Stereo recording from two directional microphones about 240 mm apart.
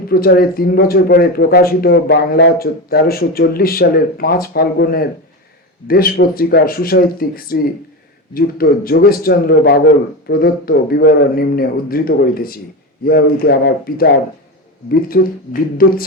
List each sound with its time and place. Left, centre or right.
0.1 s speech: left